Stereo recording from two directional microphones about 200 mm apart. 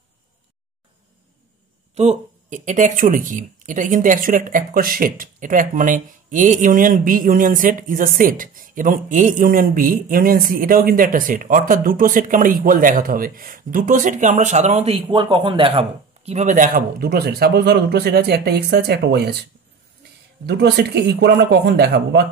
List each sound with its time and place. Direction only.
2.0 s speech: 35° right (ahead or behind)
16.3 s speech: 35° right (ahead or behind); by 22.2 s 55° right (ahead or behind)